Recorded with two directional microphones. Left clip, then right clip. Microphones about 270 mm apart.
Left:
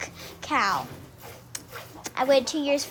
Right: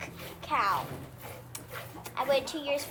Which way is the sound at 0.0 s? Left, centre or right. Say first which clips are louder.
Left 5 dB; left.